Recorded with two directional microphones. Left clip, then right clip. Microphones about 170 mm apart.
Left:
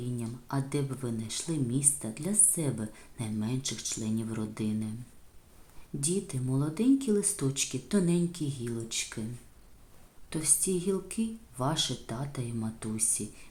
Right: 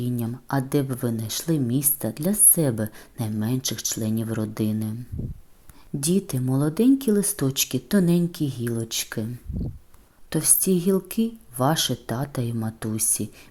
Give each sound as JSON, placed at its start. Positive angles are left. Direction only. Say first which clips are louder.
{"t": 0.0, "sound": "speech", "louder": "right 9 dB", "side_deg": -45}
{"t": 6.0, "sound": "speech", "louder": "right 8 dB", "side_deg": -45}
{"t": 10.2, "sound": "speech", "louder": "right 8 dB", "side_deg": -40}